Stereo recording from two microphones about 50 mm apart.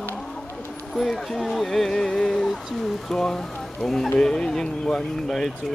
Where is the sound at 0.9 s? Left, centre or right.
Centre.